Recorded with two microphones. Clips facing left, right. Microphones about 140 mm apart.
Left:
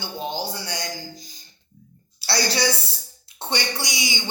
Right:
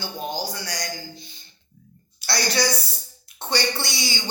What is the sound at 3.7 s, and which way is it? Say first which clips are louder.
Speech: even; 15° left (ahead or behind).